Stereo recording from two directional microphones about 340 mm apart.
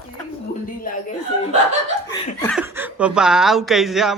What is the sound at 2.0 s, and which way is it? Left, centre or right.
Laughter, centre.